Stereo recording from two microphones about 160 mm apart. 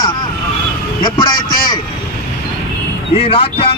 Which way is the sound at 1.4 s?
65° left (ahead or behind).